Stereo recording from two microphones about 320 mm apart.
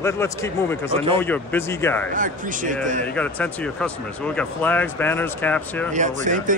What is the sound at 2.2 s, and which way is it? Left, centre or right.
Speech, right.